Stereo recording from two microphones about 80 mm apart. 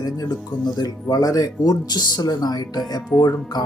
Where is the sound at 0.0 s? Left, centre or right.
Left.